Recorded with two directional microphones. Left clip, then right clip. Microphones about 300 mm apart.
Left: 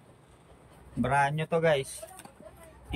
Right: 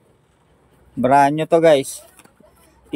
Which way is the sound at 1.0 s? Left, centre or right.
Centre.